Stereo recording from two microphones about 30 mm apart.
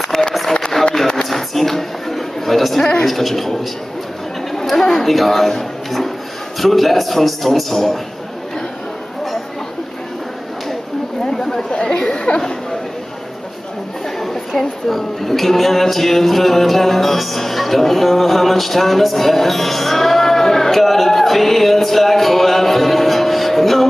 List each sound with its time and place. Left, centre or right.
0.1 s a sound: centre
3.1 s a man's voice: centre
4.5 s chatter: centre
5.0 s a man's voice: centre
11.8 s speech: left
14.2 s a woman's voice: centre